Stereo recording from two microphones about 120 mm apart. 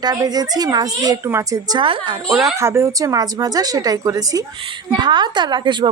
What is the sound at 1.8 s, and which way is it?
Speech, 45° right (ahead or behind).